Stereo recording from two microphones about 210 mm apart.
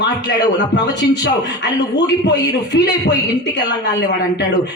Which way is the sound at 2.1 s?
55° left (ahead or behind).